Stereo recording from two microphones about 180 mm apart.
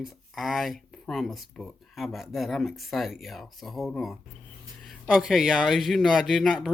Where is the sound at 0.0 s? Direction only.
Centre (ahead or behind).